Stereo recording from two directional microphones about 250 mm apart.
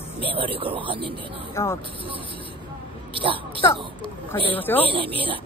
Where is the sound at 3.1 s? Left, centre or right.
Right.